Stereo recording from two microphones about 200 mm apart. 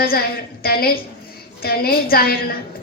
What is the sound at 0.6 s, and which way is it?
A woman's voice, 50° left (ahead or behind).